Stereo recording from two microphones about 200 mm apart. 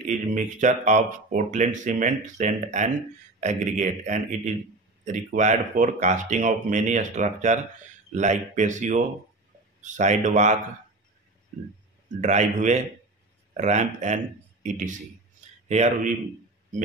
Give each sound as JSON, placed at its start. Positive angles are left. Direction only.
{"t": 0.0, "sound": "speech", "side_deg": -40}
{"t": 12.2, "sound": "speech", "side_deg": -35}